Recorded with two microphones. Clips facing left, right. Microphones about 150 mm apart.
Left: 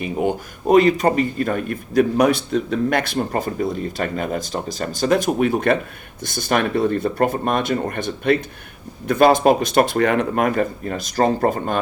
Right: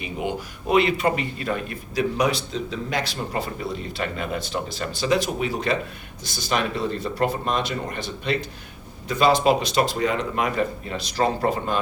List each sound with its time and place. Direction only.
0.0 s speech: 45° left (ahead or behind)